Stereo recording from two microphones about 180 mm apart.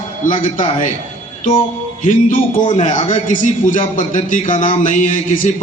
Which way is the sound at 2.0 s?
45° left (ahead or behind).